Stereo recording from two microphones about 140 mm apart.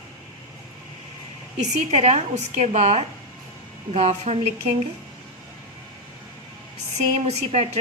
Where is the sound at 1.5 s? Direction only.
55° right (ahead or behind).